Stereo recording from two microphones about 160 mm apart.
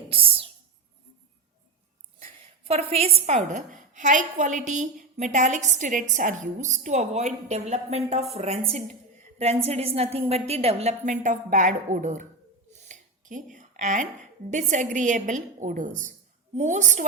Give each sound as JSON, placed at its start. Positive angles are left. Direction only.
{"t": 0.1, "sound": "whispering", "side_deg": -35}
{"t": 2.6, "sound": "a woman's voice", "side_deg": -40}